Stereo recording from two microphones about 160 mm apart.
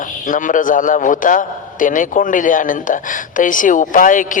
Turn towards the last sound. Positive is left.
turn(degrees=55)  # may be behind; listen again after turning